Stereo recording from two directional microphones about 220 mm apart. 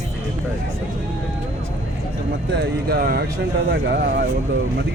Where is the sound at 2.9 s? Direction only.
45° right (ahead or behind).